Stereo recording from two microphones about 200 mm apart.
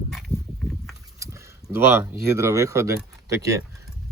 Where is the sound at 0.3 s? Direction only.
30° left (ahead or behind).